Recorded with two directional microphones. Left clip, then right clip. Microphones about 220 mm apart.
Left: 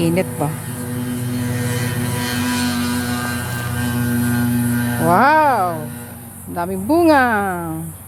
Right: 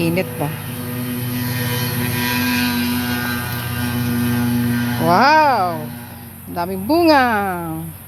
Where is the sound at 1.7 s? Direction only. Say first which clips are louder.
Right 1 dB; 50° left (ahead or behind).